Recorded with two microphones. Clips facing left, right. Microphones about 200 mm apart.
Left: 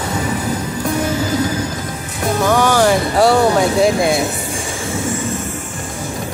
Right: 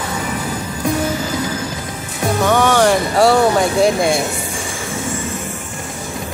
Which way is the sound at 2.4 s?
Centre (ahead or behind).